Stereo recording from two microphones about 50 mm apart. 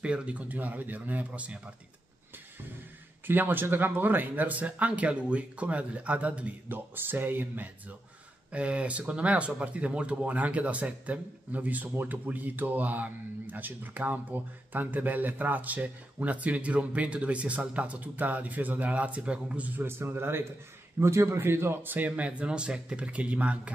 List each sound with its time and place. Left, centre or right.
0.0 s speech: right
3.3 s speech: right
7.0 s speech: right
8.5 s speech: right
19.8 s a man's voice: right
21.0 s a man's voice: right
21.4 s a man's voice: right
21.9 s speech: right
22.5 s speech: centre